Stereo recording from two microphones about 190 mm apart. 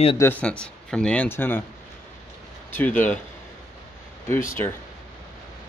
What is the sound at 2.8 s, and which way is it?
Speech, 10° left (ahead or behind).